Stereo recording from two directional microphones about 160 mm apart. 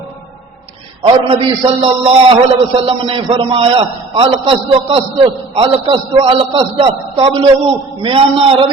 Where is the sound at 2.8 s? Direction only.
35° right (ahead or behind).